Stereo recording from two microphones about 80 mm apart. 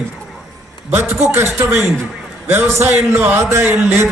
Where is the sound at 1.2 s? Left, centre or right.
Right.